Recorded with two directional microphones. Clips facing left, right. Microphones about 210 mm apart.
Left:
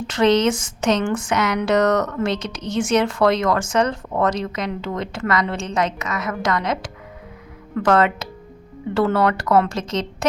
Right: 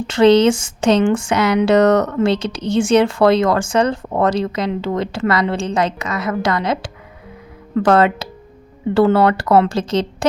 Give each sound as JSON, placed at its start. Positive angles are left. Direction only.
{"t": 0.1, "sound": "speech", "side_deg": -30}